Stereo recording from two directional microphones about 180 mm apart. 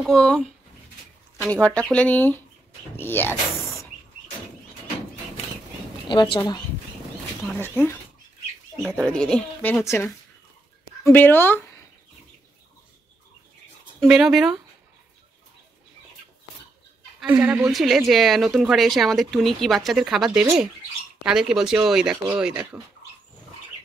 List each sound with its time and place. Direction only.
0.0 s a woman's voice: 5° left (ahead or behind)
6.0 s speech: 30° left (ahead or behind)
7.6 s speech: 10° left (ahead or behind)
8.8 s speech: centre (ahead or behind)
14.0 s a woman's voice: 5° right (ahead or behind)
17.3 s a woman's voice: 5° right (ahead or behind)